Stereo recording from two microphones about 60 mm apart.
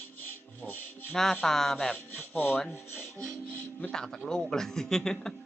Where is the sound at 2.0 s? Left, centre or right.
Left.